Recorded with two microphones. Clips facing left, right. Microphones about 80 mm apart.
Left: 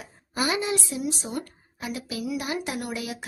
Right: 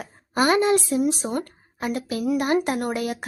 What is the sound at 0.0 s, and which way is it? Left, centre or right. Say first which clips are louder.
Speech: right 7 dB; right.